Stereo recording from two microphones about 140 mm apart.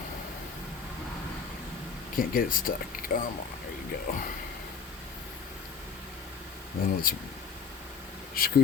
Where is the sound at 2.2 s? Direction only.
90° left.